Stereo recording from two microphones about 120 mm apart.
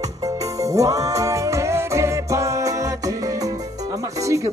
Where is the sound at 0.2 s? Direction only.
30° right (ahead or behind).